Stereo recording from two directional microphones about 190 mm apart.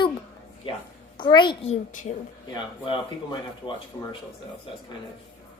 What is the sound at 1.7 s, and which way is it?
Speech, 40° left (ahead or behind).